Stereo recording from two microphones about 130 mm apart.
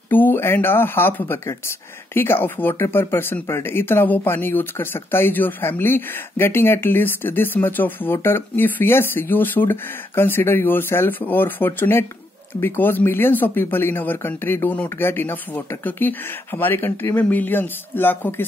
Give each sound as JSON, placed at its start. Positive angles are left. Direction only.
{"t": 0.1, "sound": "speech", "side_deg": 15}